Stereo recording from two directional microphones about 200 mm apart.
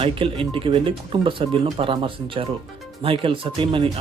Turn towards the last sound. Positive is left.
turn(degrees=-25)  # may be behind; listen again after turning